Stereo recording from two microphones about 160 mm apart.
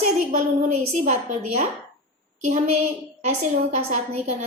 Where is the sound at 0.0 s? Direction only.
50° right (ahead or behind).